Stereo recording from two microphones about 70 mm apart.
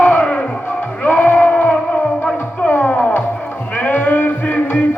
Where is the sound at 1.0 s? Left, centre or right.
Left.